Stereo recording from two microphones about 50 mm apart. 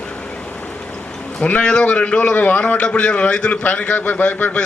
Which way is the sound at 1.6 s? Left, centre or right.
Centre.